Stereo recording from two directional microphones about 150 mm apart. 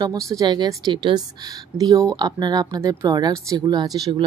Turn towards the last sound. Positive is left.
turn(degrees=-30)  # may be behind; listen again after turning